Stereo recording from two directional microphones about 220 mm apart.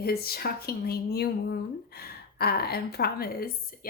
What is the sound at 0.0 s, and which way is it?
Speech, 45° left (ahead or behind).